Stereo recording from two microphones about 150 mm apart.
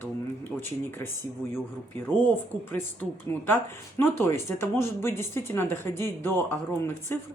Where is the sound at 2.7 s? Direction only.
15° left (ahead or behind).